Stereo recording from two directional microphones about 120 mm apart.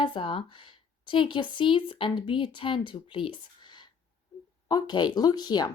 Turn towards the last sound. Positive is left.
turn(degrees=35)  # may be behind; listen again after turning